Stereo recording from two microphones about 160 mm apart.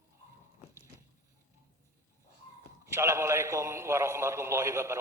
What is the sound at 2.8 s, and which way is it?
A man's voice, 15° right (ahead or behind).